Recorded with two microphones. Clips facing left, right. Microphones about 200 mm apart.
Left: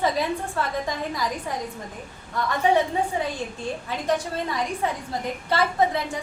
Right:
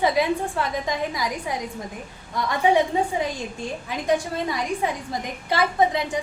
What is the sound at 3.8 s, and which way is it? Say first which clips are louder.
A woman's voice: right 3 dB; 10° right (ahead or behind).